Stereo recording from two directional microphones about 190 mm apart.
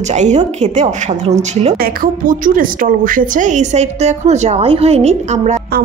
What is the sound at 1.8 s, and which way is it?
A woman's voice, 50° right (ahead or behind).